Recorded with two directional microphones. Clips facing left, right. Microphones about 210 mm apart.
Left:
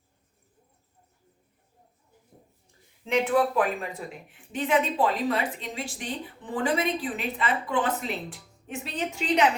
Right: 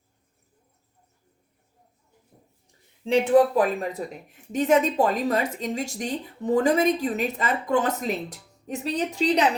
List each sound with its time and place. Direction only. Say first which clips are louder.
3.0 s a woman's voice: right 5 dB; 30° right (ahead or behind)